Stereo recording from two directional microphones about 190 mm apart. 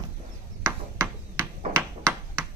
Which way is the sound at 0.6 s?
15° right (ahead or behind).